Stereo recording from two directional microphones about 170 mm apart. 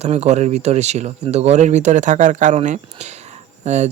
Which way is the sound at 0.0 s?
40° right (ahead or behind).